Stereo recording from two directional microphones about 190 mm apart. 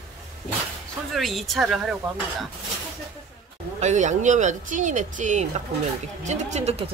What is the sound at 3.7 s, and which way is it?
Speech, 40° right (ahead or behind).